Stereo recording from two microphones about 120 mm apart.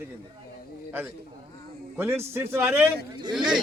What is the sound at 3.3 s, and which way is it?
Speech, 5° right (ahead or behind).